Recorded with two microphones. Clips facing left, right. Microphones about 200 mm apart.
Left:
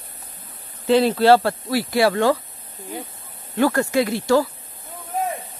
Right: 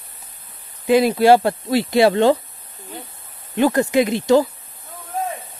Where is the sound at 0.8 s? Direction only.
15° right (ahead or behind).